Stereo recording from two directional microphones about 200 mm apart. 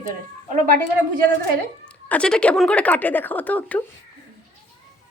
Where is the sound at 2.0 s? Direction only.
5° left (ahead or behind).